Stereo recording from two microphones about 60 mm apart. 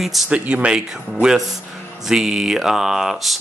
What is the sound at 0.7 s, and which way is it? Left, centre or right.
Speech, centre.